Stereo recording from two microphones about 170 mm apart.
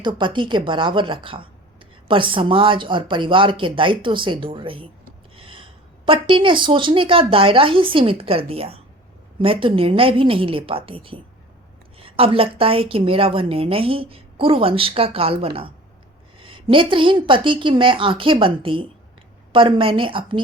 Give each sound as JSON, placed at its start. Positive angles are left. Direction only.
{"t": 0.2, "sound": "a woman's voice", "side_deg": -30}
{"t": 5.4, "sound": "gasp", "side_deg": -30}
{"t": 6.1, "sound": "a woman's voice", "side_deg": -30}